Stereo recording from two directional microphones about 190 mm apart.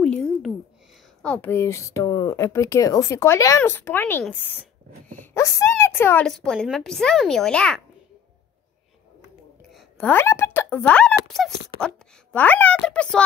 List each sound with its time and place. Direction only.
0.0 s a sound: 5° left (ahead or behind)
1.2 s speech: 10° left (ahead or behind)
9.7 s a child's voice: centre (ahead or behind)